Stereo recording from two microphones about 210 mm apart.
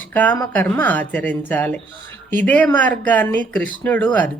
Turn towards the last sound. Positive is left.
turn(degrees=10)  # may be behind; listen again after turning